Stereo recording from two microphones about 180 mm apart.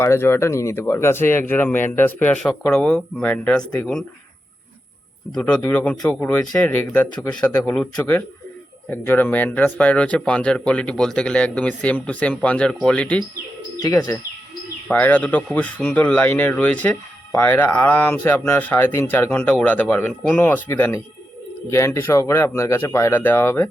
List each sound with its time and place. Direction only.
0.0 s speech: 15° left (ahead or behind)
5.3 s speech: 5° left (ahead or behind)
13.7 s speech: 20° left (ahead or behind)
14.8 s speech: 10° left (ahead or behind)